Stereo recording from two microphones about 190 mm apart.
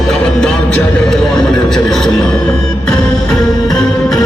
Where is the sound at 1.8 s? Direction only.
5° left (ahead or behind).